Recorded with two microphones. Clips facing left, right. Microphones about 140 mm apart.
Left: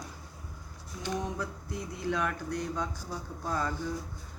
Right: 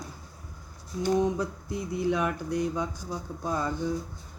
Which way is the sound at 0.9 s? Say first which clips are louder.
Right 9 dB; 30° right (ahead or behind).